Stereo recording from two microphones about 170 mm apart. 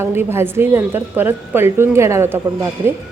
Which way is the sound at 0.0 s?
15° right (ahead or behind).